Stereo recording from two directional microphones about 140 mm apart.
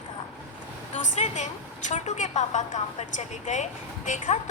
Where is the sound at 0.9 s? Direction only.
60° left (ahead or behind).